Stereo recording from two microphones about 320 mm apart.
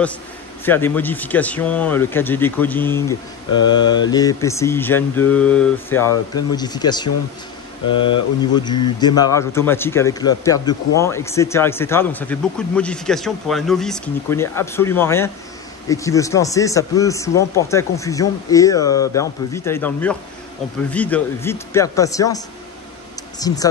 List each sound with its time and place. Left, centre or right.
0.7 s speech: centre
23.4 s speech: centre